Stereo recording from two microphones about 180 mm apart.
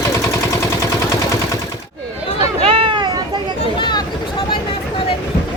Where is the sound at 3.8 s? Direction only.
25° left (ahead or behind).